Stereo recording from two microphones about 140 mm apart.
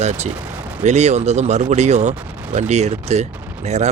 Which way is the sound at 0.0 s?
55° right (ahead or behind).